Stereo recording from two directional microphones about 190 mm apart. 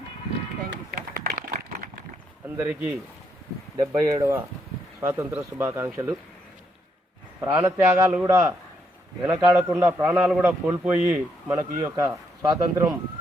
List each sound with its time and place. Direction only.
0.9 s a sound: 50° right (ahead or behind)
2.6 s a man's voice: 10° right (ahead or behind)
7.4 s a man's voice: 15° right (ahead or behind)